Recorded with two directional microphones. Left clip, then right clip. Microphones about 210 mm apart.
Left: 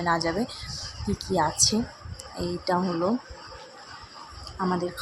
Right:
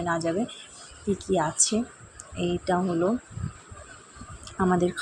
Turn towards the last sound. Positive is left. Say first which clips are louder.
# right 4 dB
turn(degrees=-15)  # may be behind; listen again after turning